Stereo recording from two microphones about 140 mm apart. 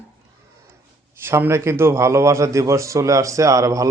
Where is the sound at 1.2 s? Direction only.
20° right (ahead or behind).